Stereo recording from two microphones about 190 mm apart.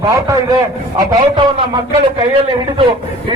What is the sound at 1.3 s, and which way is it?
A man's voice, 25° right (ahead or behind).